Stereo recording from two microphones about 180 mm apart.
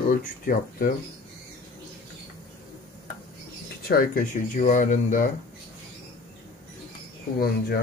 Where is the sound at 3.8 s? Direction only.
50° left (ahead or behind).